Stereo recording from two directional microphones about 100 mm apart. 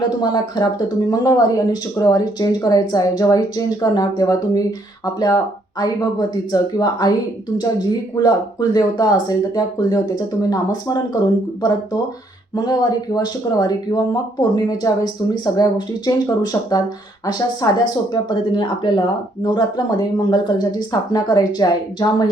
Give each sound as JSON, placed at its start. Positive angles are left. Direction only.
{"t": 0.2, "sound": "speech", "side_deg": 45}
{"t": 13.1, "sound": "speech", "side_deg": 40}